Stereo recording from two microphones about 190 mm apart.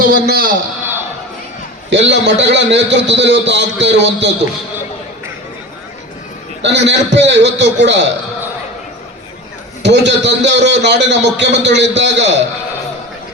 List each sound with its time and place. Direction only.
0.0 s a man's voice: 50° right (ahead or behind)
1.9 s a man's voice: 70° right (ahead or behind)
6.6 s a man's voice: 65° right (ahead or behind)
9.8 s a man's voice: 65° right (ahead or behind)